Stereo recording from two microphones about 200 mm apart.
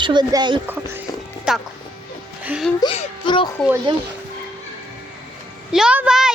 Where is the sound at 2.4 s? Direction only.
5° right (ahead or behind).